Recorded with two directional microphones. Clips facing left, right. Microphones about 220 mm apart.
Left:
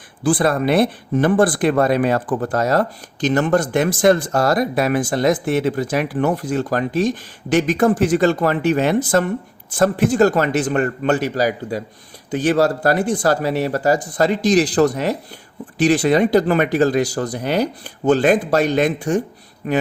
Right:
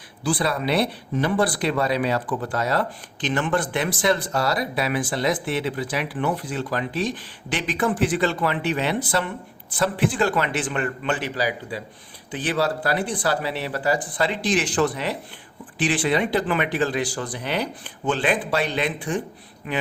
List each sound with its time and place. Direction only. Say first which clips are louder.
0.3 s speech: left 7 dB; 50° left (ahead or behind)